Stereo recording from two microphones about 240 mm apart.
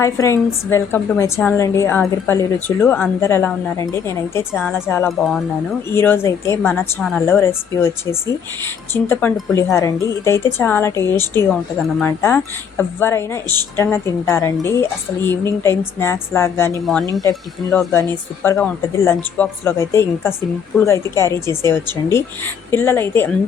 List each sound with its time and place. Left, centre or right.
0.0 s a woman's voice: centre